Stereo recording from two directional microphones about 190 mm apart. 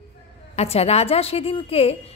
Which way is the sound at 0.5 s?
35° left (ahead or behind).